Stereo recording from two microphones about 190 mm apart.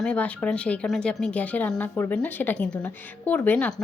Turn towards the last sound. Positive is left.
turn(degrees=5)  # may be behind; listen again after turning